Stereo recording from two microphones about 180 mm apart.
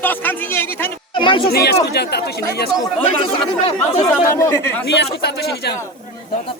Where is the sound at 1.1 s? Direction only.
30° left (ahead or behind).